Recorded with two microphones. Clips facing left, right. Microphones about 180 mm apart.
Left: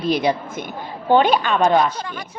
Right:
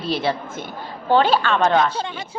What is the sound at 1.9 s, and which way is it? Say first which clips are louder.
Speech: right 2 dB; 25° right (ahead or behind).